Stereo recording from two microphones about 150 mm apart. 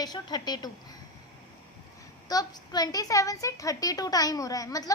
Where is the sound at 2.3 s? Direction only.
25° left (ahead or behind).